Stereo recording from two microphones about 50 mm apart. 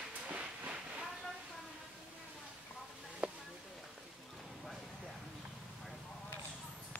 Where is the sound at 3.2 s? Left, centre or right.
Right.